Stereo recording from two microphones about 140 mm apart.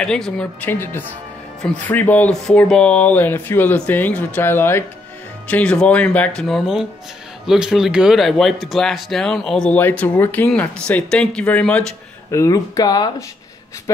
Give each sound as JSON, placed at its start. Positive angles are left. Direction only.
{"t": 0.0, "sound": "speech", "side_deg": 5}
{"t": 12.3, "sound": "speech", "side_deg": 25}